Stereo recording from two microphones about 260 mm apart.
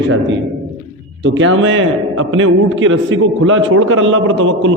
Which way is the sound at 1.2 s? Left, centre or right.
Right.